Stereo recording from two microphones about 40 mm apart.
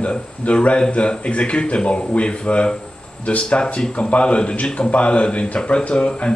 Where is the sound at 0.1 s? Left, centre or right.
Left.